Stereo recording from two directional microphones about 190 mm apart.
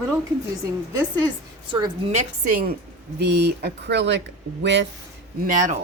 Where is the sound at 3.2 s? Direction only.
60° right (ahead or behind).